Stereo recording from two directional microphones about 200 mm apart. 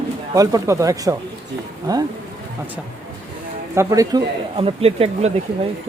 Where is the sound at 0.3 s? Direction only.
15° right (ahead or behind).